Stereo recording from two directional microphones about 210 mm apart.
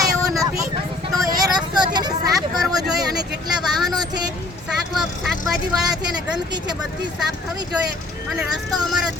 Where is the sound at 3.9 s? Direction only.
20° right (ahead or behind).